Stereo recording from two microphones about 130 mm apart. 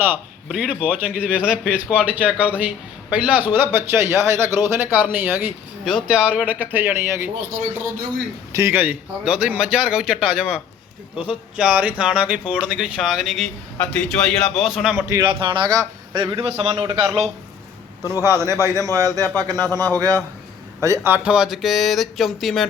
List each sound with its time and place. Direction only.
0.4 s a man's voice: 5° right (ahead or behind)
8.5 s a man's voice: 20° right (ahead or behind)
12.6 s a sound: 10° right (ahead or behind)
14.9 s a man's voice: 25° right (ahead or behind)
15.2 s a man's voice: 40° right (ahead or behind)
18.0 s a man's voice: 25° left (ahead or behind)
18.3 s a man's voice: 20° right (ahead or behind)
19.5 s a man's voice: 15° left (ahead or behind)
20.0 s a man's voice: 25° right (ahead or behind)
21.3 s a sound: 5° right (ahead or behind)